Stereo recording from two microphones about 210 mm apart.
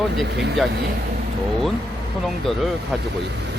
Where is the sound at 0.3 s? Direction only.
55° right (ahead or behind).